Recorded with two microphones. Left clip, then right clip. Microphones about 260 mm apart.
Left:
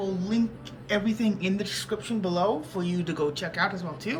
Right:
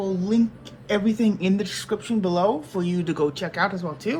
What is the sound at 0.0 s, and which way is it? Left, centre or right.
Speech, centre.